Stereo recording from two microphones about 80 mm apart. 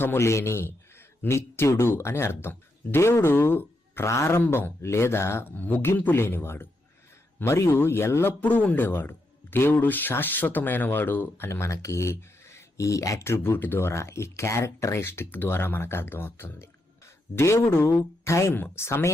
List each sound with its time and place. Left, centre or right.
0.0 s a man's voice: left
8.4 s speech: centre; by 13.2 s left
13.2 s a man's voice: left